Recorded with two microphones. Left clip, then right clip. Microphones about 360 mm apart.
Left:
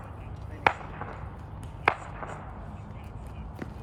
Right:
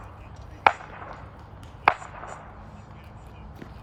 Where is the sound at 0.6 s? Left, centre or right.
Centre.